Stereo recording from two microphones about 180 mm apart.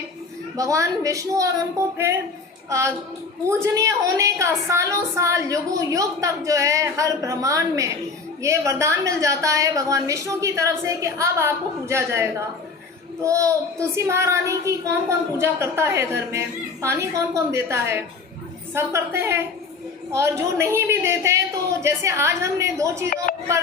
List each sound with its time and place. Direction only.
0.5 s a woman's voice: 20° right (ahead or behind)
2.6 s a woman's voice: 15° right (ahead or behind)
23.3 s music: 45° left (ahead or behind)